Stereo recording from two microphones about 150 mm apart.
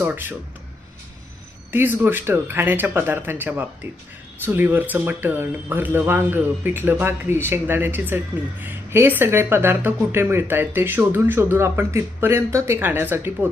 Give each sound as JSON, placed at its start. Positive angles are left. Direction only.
{"t": 0.0, "sound": "speech", "side_deg": -15}
{"t": 1.7, "sound": "speech", "side_deg": -15}